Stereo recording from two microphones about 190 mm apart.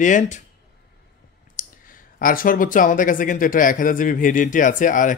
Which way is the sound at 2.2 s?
45° left (ahead or behind).